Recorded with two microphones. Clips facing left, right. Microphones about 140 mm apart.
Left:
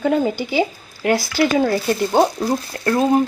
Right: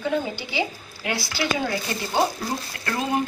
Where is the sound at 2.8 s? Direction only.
35° left (ahead or behind).